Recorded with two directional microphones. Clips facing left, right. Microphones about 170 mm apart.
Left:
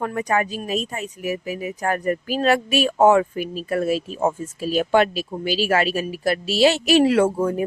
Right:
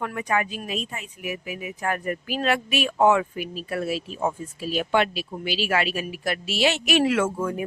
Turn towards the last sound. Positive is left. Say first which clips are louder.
# left 6 dB
turn(degrees=30)  # may be behind; listen again after turning